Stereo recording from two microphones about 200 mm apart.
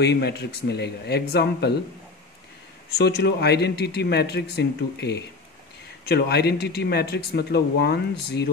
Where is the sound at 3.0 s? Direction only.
55° left (ahead or behind).